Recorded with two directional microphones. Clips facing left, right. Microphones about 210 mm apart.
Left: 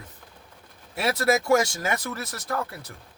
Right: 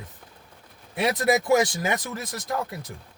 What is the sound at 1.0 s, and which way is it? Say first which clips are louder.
Speech: right 1 dB; 15° right (ahead or behind).